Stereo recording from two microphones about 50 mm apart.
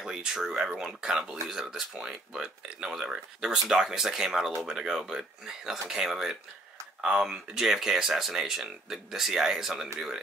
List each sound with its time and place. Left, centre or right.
0.0 s speech: centre
1.1 s speech: centre
1.6 s speech: centre